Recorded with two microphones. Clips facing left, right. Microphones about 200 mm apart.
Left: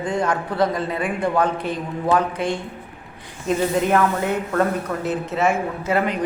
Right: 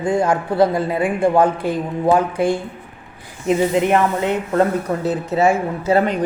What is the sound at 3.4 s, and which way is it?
Speech, 20° right (ahead or behind).